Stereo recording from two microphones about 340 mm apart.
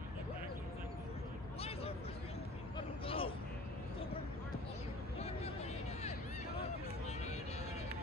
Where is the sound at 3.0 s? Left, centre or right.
Centre.